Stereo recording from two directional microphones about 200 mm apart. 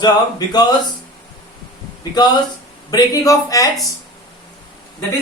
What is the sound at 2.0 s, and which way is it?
A man's voice, 20° left (ahead or behind).